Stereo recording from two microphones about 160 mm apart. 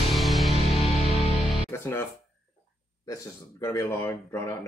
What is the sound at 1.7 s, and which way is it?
Music, 20° left (ahead or behind).